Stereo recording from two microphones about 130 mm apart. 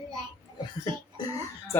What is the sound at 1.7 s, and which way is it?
Speech, 20° left (ahead or behind).